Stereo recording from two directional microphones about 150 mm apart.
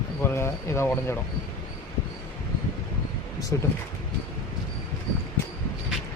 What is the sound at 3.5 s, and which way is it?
Speech, 20° left (ahead or behind).